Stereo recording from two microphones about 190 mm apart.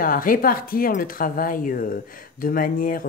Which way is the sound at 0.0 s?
45° left (ahead or behind).